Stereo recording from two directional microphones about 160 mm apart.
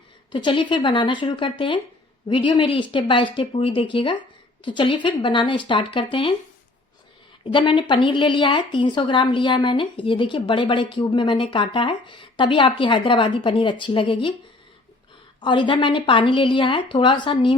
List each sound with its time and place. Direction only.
0.3 s speech: 30° left (ahead or behind)
7.4 s speech: 30° left (ahead or behind)
15.4 s speech: 30° left (ahead or behind)